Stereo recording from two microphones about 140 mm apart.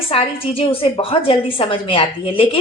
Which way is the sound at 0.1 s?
45° left (ahead or behind).